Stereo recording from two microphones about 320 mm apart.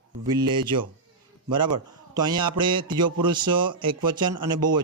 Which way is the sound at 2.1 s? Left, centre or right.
Centre.